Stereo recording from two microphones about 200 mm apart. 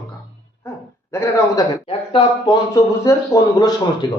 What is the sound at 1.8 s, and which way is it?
Speech, 25° left (ahead or behind).